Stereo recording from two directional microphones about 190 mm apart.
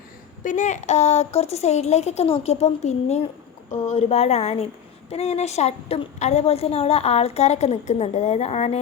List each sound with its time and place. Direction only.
0.4 s a woman's voice: 40° left (ahead or behind)